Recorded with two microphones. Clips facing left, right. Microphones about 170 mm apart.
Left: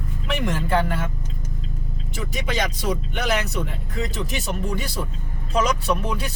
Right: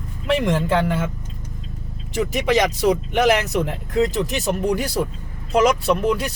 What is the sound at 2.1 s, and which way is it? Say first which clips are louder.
Speech: right 8 dB; 85° right.